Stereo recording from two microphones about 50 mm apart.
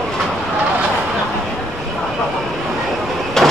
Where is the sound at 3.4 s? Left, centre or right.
Centre.